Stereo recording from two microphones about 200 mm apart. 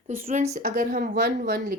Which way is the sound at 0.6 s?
50° right (ahead or behind).